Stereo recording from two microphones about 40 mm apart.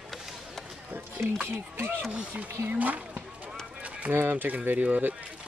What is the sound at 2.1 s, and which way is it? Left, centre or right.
Speech, right.